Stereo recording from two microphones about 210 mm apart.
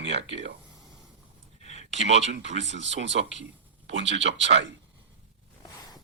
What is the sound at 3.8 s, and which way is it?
Speech, 60° right (ahead or behind).